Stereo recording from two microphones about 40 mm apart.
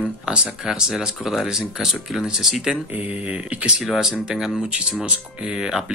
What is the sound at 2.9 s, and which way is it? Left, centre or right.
Speech, right.